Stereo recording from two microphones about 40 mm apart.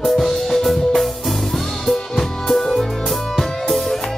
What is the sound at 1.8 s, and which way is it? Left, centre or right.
Music, centre.